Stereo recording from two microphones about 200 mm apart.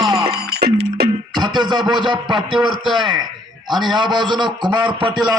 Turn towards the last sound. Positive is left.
turn(degrees=-20)  # may be behind; listen again after turning